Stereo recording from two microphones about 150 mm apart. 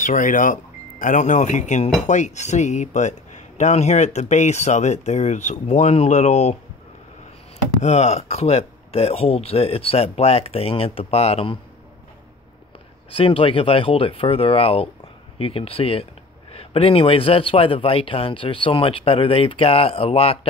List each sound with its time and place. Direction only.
0.0 s speech: 60° left (ahead or behind)
7.8 s speech: 45° left (ahead or behind)
13.1 s a man's voice: 35° left (ahead or behind)